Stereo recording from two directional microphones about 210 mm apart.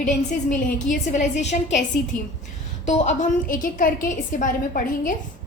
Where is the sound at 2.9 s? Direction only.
35° left (ahead or behind).